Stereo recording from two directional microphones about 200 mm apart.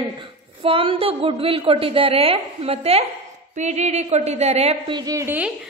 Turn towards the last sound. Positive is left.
turn(degrees=-10)  # may be behind; listen again after turning